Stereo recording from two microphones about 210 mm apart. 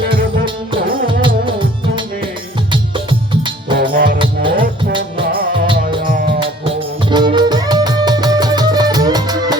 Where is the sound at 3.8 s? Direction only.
45° right (ahead or behind).